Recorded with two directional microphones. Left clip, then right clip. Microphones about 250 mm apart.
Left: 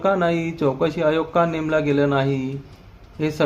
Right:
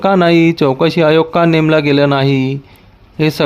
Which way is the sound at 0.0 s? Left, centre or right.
Right.